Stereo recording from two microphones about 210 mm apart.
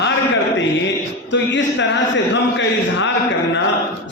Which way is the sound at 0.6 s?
60° left (ahead or behind).